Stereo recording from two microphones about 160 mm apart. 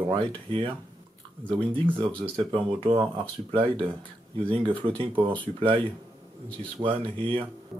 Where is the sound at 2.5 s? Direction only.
35° right (ahead or behind).